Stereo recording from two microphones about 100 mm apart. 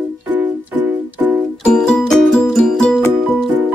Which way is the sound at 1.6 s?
10° left (ahead or behind).